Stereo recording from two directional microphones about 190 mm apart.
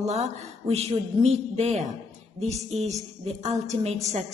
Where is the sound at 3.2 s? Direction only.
35° right (ahead or behind).